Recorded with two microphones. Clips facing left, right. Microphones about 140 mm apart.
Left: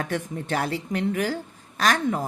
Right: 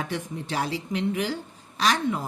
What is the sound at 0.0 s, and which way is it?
Speech, 50° left (ahead or behind).